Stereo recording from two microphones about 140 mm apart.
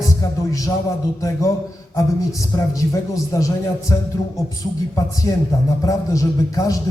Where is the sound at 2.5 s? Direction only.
20° left (ahead or behind).